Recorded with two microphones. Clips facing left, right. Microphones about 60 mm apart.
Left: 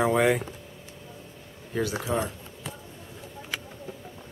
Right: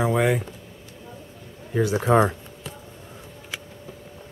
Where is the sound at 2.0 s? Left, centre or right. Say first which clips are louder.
Right 10 dB; right.